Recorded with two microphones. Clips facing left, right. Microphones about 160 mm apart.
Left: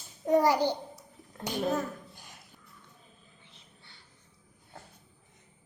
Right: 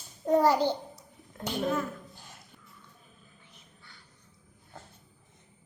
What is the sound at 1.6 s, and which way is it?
Speech, 40° left (ahead or behind).